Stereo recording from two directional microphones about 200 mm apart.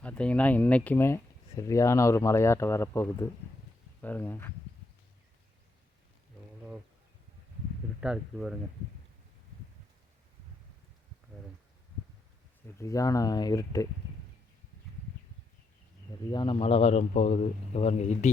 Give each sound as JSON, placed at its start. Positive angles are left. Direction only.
{"t": 0.0, "sound": "speech", "side_deg": 5}
{"t": 8.0, "sound": "speech", "side_deg": -5}
{"t": 12.6, "sound": "speech", "side_deg": 15}
{"t": 16.3, "sound": "a man's voice", "side_deg": 25}